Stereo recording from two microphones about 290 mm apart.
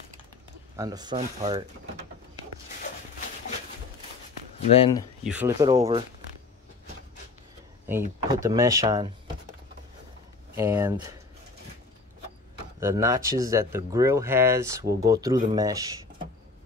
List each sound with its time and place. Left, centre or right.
0.7 s speech: centre
4.7 s speech: centre
5.2 s speech: centre
7.8 s speech: centre
10.5 s speech: centre
12.8 s speech: centre